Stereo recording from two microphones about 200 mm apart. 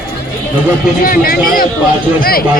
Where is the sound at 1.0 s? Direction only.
45° left (ahead or behind).